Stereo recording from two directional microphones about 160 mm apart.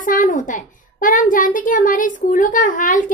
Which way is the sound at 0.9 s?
60° left (ahead or behind).